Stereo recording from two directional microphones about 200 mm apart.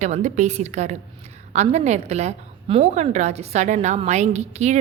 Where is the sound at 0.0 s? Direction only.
35° right (ahead or behind).